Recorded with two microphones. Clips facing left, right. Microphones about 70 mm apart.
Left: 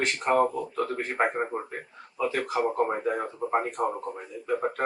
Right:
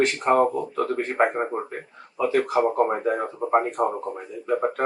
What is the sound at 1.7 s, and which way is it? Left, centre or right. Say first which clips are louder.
Speech: right 4 dB; centre.